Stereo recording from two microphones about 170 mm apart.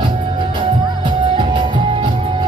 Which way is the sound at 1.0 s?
30° right (ahead or behind).